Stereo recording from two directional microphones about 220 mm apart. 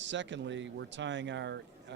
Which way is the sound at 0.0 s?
55° right (ahead or behind).